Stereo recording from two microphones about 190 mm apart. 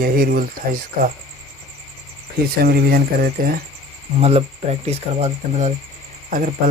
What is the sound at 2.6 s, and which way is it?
Speech, 55° right (ahead or behind).